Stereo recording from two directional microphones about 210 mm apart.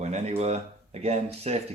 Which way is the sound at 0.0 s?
30° right (ahead or behind).